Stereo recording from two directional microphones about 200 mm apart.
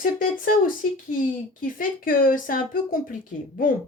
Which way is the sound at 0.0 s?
45° left (ahead or behind).